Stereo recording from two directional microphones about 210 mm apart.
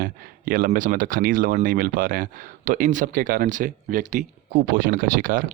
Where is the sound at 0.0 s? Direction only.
40° right (ahead or behind).